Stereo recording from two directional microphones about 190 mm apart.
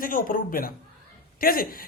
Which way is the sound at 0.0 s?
45° left (ahead or behind).